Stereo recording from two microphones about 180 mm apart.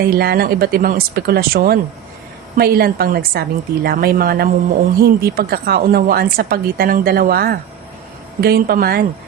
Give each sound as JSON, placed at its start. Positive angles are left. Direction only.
{"t": 0.0, "sound": "a woman's voice", "side_deg": -60}